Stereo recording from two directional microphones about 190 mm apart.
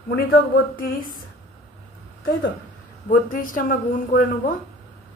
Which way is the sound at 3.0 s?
45° left (ahead or behind).